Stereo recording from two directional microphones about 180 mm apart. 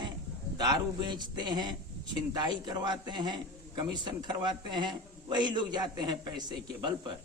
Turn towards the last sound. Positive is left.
turn(degrees=-25)  # may be behind; listen again after turning